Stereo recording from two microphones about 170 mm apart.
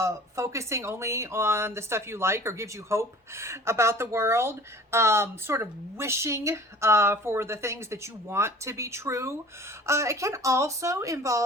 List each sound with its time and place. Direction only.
0.0 s speech: 15° right (ahead or behind)